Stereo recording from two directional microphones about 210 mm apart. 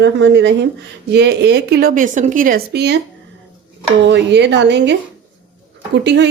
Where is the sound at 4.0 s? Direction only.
55° right (ahead or behind).